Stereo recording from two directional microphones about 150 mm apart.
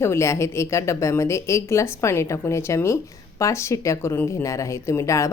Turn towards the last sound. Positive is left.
turn(degrees=20)  # may be behind; listen again after turning